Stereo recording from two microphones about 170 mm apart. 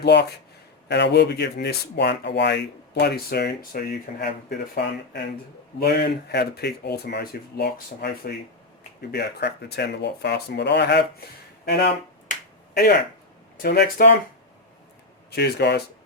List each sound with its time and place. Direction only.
0.0 s speech: 80° left
0.9 s speech: 90° left
5.8 s speech: 70° left (ahead or behind)
11.6 s speech: 75° left (ahead or behind)
15.4 s speech: 75° left (ahead or behind)